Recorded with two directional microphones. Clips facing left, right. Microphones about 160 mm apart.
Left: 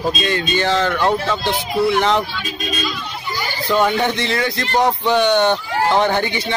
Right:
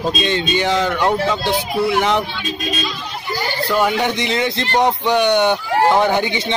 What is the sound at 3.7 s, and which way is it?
Speech, 10° right (ahead or behind).